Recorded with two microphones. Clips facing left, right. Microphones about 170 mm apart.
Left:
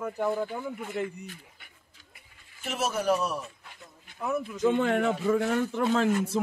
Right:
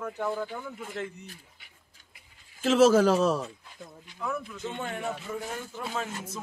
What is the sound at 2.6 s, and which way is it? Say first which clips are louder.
Speech: right 9 dB; 90° right.